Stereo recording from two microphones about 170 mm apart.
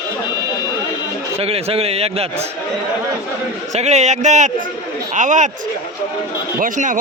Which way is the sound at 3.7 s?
40° right (ahead or behind).